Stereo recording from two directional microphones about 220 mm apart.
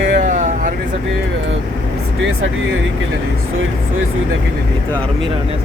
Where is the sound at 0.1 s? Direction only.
35° right (ahead or behind).